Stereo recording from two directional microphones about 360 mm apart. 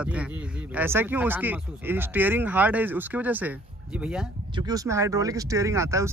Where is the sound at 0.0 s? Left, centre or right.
Centre.